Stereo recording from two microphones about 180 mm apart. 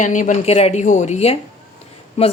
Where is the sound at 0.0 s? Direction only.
45° left (ahead or behind).